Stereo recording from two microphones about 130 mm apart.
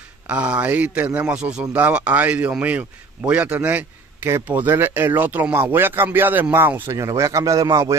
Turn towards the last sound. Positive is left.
turn(degrees=-25)  # may be behind; listen again after turning